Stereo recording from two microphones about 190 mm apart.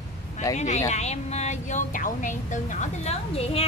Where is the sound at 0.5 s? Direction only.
35° left (ahead or behind).